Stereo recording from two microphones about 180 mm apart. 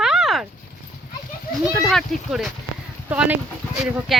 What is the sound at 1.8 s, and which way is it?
Speech, centre (ahead or behind).